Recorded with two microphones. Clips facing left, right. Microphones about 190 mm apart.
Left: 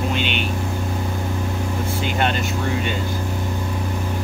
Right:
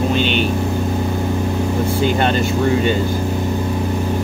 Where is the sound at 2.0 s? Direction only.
35° right (ahead or behind).